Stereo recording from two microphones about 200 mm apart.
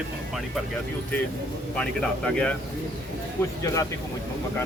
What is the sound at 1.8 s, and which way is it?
Speech, 5° left (ahead or behind).